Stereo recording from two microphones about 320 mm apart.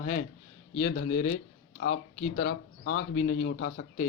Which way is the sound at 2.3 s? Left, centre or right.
Left.